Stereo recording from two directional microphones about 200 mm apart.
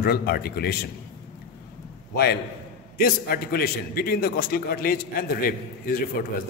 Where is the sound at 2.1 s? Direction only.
55° left (ahead or behind).